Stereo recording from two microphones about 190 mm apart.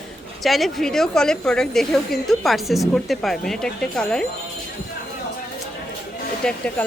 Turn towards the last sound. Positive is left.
turn(degrees=5)  # may be behind; listen again after turning